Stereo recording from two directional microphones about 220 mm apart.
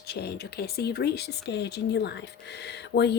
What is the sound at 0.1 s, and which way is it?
Speech, 45° left (ahead or behind).